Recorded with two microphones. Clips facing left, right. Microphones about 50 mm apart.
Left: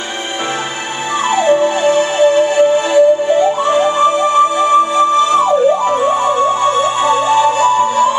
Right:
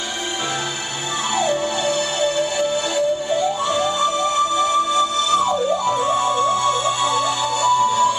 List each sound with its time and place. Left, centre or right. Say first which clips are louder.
1.3 s music: left 9 dB; left